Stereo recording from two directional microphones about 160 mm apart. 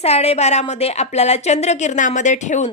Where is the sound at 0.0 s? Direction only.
40° left (ahead or behind).